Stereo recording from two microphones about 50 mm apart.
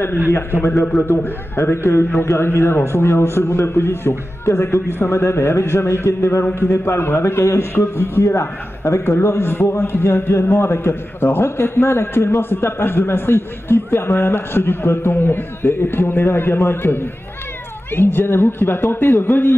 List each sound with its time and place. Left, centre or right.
0.3 s a man's voice: left
4.5 s a man's voice: left
5.1 s a man's voice: left
6.4 s a man's voice: left